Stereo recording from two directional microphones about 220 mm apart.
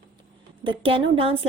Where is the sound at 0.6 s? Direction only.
25° right (ahead or behind).